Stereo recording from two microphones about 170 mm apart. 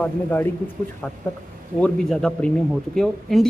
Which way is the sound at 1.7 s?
5° left (ahead or behind).